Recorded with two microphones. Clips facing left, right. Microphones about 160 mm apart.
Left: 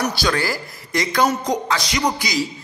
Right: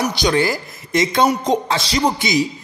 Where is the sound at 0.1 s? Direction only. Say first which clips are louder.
Right 4 dB; 20° right (ahead or behind).